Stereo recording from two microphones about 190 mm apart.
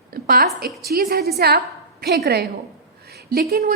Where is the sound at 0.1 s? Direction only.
50° right (ahead or behind).